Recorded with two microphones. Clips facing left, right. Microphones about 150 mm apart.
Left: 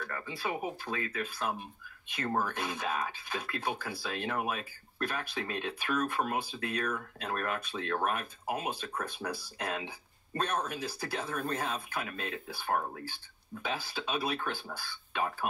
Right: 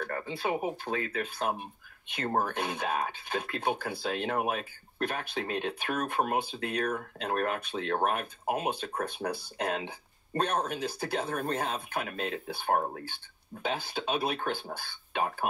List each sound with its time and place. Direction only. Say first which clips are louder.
0.3 s speech: right 4 dB; 55° right (ahead or behind)
12.7 s speech: right 3 dB; 35° right (ahead or behind)
13.0 s speech: even; 60° right (ahead or behind)